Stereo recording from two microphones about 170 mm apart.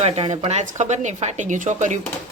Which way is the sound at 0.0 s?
40° right (ahead or behind).